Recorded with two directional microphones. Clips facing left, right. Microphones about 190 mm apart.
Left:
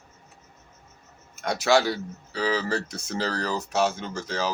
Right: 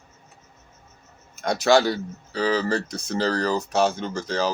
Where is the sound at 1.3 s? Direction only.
5° left (ahead or behind).